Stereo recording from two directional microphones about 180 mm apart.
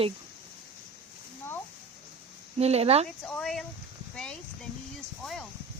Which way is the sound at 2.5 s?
35° right (ahead or behind).